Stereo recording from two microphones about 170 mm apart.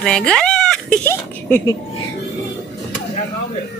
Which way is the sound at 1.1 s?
15° left (ahead or behind).